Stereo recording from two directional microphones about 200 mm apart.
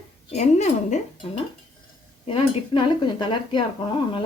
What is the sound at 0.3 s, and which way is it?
Speech, 35° left (ahead or behind).